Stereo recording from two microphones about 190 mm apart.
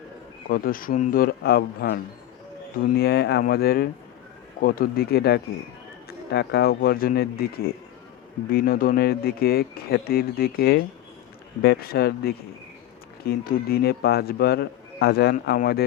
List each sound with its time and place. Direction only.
0.4 s a man's voice: 50° left (ahead or behind)